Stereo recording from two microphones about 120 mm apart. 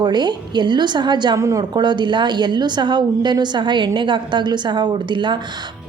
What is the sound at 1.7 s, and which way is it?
A woman's voice, 35° right (ahead or behind).